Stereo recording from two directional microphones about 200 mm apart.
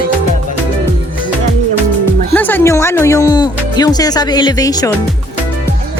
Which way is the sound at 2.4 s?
10° left (ahead or behind).